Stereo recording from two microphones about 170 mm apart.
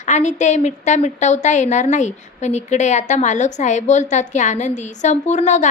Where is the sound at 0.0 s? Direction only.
45° left (ahead or behind).